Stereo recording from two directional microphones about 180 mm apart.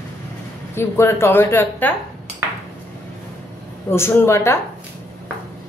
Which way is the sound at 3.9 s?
15° left (ahead or behind).